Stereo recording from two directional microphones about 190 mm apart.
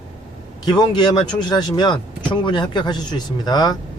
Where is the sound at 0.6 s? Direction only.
25° left (ahead or behind).